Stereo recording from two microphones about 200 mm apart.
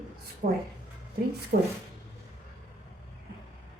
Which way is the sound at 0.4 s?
50° right (ahead or behind).